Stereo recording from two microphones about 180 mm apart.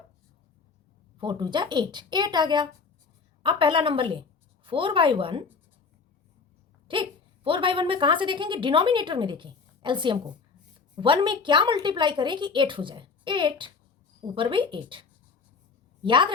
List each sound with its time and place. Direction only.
1.2 s a woman's voice: 25° right (ahead or behind)
6.8 s a woman's voice: 30° right (ahead or behind)
16.0 s a woman's voice: 25° right (ahead or behind)